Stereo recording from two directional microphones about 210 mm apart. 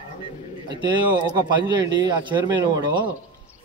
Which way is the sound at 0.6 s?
20° right (ahead or behind).